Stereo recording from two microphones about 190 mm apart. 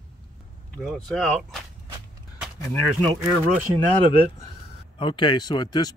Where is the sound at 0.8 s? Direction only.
Centre (ahead or behind).